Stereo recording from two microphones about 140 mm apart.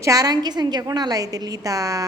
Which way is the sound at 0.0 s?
25° right (ahead or behind).